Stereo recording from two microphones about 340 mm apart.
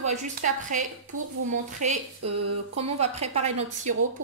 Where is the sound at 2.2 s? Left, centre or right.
Right.